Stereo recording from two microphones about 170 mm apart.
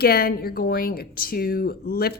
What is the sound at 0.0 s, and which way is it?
Speech, 65° left (ahead or behind).